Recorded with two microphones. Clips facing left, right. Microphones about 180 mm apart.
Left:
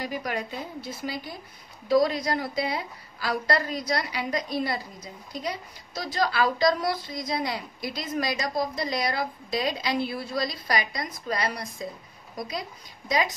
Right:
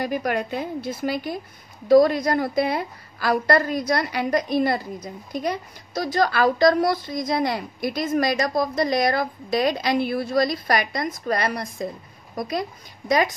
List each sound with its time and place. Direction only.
0.0 s a woman's voice: 55° right (ahead or behind)
1.9 s a woman's voice: 50° right (ahead or behind)